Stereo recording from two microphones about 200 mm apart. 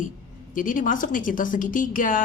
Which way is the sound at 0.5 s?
40° left (ahead or behind).